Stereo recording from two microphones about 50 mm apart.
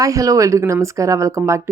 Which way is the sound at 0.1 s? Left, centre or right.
Right.